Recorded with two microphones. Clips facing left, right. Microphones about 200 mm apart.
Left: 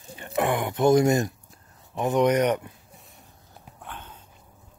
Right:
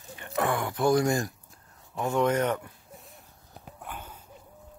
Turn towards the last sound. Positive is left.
turn(degrees=-10)  # may be behind; listen again after turning